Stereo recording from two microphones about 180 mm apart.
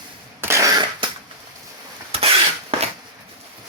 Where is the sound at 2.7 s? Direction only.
30° right (ahead or behind).